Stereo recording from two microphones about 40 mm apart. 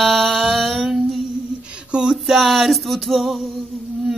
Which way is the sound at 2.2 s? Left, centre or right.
Centre.